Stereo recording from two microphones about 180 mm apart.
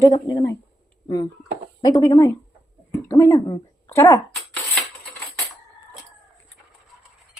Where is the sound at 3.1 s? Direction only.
15° left (ahead or behind).